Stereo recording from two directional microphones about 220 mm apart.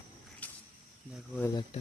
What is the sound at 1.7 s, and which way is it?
Speech, 30° left (ahead or behind).